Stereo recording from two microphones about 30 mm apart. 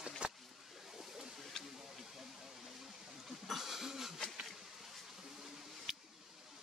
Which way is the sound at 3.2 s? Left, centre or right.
Centre.